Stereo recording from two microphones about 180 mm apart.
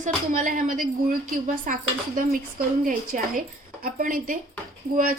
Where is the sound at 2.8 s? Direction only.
50° right (ahead or behind).